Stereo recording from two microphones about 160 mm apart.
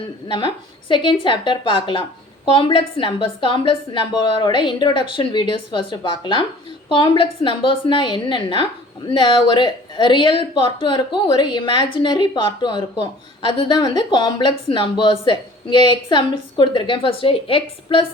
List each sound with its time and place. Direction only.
0.3 s speech: 30° left (ahead or behind)